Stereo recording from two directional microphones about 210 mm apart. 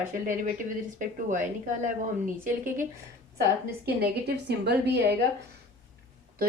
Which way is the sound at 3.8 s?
50° right (ahead or behind).